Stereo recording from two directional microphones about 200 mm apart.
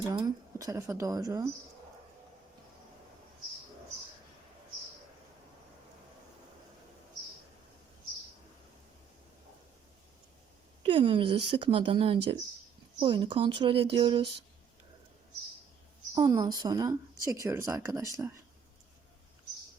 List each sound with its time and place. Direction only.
0.0 s speech: 20° right (ahead or behind)
10.8 s speech: 25° right (ahead or behind)
16.1 s speech: 20° right (ahead or behind)